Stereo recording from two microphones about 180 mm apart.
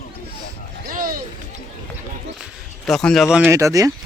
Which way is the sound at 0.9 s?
50° right (ahead or behind).